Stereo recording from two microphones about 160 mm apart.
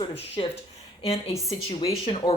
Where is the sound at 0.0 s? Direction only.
35° left (ahead or behind).